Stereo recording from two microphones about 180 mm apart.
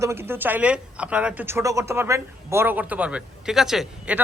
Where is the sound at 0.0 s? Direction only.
15° right (ahead or behind).